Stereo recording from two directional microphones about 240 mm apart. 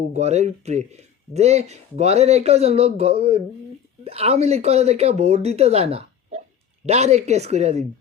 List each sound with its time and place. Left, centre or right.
0.1 s speech: right